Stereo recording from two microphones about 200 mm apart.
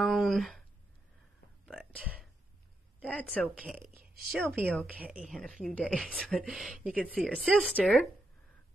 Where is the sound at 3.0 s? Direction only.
5° left (ahead or behind).